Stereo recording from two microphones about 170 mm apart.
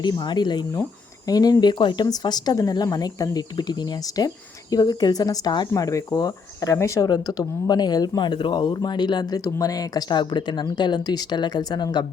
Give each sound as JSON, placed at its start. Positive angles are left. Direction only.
{"t": 0.0, "sound": "speech", "side_deg": 25}